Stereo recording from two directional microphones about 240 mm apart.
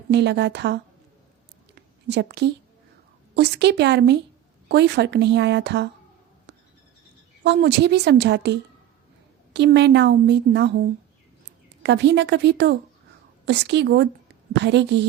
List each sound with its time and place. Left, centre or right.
0.1 s a woman's voice: right
2.0 s a woman's voice: right
7.4 s a woman's voice: right
11.8 s a woman's voice: right